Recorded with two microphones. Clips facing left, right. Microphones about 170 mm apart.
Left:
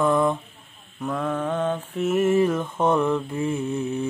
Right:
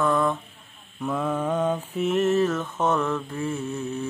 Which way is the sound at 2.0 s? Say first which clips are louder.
Left 2 dB; 10° left (ahead or behind).